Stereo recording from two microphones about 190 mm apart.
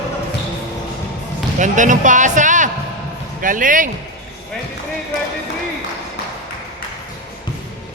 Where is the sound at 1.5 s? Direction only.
40° right (ahead or behind).